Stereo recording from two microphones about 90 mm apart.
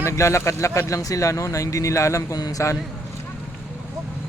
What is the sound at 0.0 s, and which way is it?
Speech, 35° left (ahead or behind).